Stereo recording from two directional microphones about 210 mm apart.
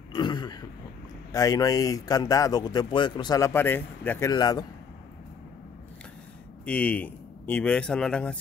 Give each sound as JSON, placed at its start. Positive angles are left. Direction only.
{"t": 0.1, "sound": "throat clearing", "side_deg": 20}
{"t": 1.3, "sound": "speech", "side_deg": 15}
{"t": 6.6, "sound": "speech", "side_deg": 5}